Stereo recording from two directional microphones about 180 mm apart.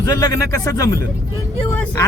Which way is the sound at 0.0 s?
20° left (ahead or behind).